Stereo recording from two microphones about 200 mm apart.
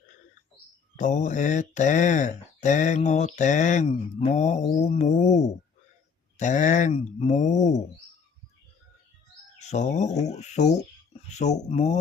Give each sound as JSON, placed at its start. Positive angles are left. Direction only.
{"t": 0.9, "sound": "speech", "side_deg": 40}
{"t": 9.6, "sound": "speech", "side_deg": 35}